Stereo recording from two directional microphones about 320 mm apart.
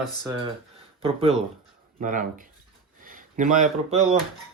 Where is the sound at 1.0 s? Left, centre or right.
Centre.